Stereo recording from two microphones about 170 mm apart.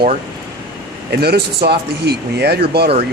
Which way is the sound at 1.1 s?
65° right (ahead or behind).